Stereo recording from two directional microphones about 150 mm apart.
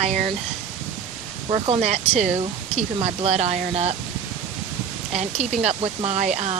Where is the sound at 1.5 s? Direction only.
45° right (ahead or behind).